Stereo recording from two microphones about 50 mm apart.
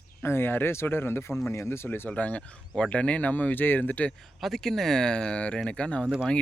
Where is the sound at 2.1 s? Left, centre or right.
Left.